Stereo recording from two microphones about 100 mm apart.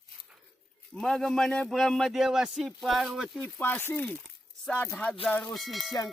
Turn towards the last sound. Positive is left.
turn(degrees=0)  # may be behind; listen again after turning